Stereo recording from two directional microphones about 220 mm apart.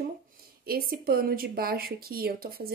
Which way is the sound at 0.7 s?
45° right (ahead or behind).